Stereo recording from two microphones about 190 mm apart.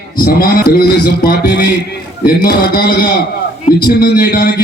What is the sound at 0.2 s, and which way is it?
A man's voice, 50° left (ahead or behind).